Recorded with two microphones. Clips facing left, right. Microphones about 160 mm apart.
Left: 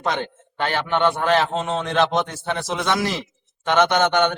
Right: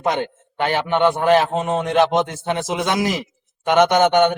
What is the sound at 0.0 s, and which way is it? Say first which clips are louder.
A man's voice: right 3 dB; 15° right (ahead or behind).